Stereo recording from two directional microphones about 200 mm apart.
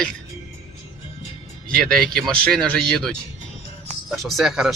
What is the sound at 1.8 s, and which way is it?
Speech, 5° left (ahead or behind).